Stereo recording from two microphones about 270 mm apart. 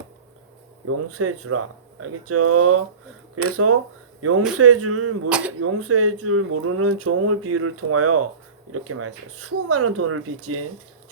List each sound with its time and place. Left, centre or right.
0.9 s speech: right
5.3 s speech: centre
5.5 s speech: right